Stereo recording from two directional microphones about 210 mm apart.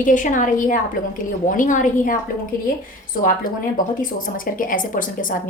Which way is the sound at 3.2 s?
40° left (ahead or behind).